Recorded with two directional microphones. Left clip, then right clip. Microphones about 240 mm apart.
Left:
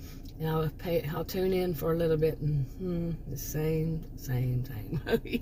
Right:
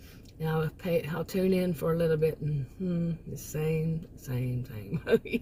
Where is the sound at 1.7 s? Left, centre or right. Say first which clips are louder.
Right 1 dB; right.